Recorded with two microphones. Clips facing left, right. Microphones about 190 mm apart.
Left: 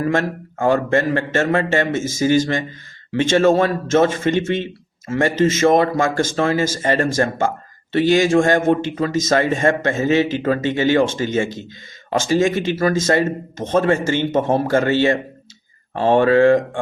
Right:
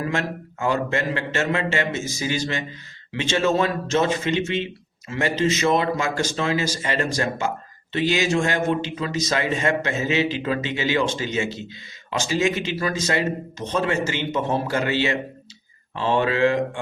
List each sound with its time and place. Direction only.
0.0 s a man's voice: 50° left (ahead or behind)